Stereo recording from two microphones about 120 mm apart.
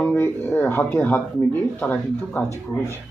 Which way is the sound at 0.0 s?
15° left (ahead or behind).